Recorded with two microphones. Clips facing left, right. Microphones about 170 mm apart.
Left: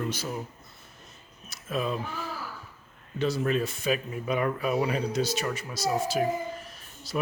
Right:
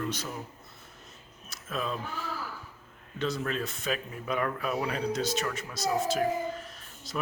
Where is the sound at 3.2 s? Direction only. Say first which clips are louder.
Left 5 dB; 5° left (ahead or behind).